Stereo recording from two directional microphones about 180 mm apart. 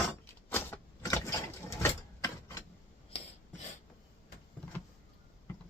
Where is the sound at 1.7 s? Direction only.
15° left (ahead or behind).